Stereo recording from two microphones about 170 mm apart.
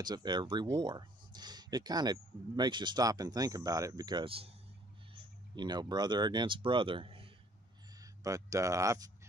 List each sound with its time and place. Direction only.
0.0 s speech: 25° right (ahead or behind)
5.6 s speech: 25° right (ahead or behind)
8.0 s speech: 20° right (ahead or behind)